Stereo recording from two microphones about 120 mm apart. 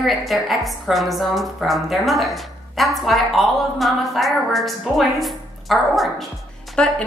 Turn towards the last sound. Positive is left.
turn(degrees=5)  # may be behind; listen again after turning